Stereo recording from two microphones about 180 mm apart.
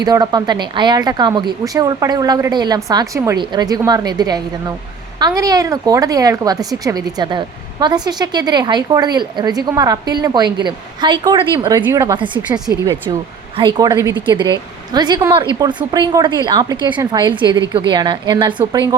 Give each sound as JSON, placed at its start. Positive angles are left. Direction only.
{"t": 0.0, "sound": "a woman's voice", "side_deg": -20}